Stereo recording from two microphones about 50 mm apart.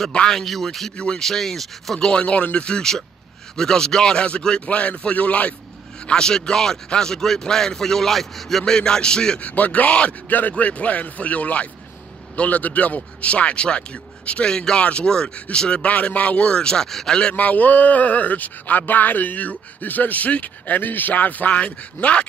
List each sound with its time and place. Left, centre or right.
0.3 s a man's voice: centre
2.0 s a man's voice: left
6.0 s a man's voice: centre
9.4 s a man's voice: left
15.8 s a man's voice: left
17.4 s speech: left